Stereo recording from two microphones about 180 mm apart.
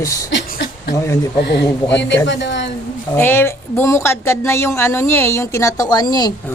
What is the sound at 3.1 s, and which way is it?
Speech, 10° left (ahead or behind).